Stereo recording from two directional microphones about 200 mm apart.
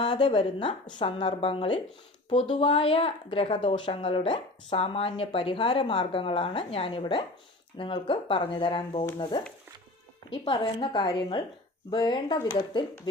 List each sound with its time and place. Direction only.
0.0 s a woman's voice: 25° left (ahead or behind)
10.2 s a woman's voice: 25° left (ahead or behind)